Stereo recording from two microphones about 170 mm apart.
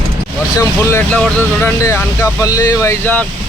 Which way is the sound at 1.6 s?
15° left (ahead or behind).